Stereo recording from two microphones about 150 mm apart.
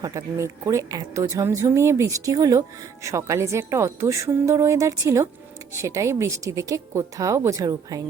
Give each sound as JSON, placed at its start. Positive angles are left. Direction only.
{"t": 0.0, "sound": "a woman's voice", "side_deg": -20}